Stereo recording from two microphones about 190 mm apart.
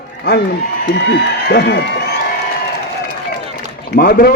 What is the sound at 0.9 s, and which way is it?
A man's voice, 65° left (ahead or behind).